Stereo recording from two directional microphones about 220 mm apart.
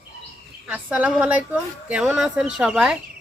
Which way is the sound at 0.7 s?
5° right (ahead or behind).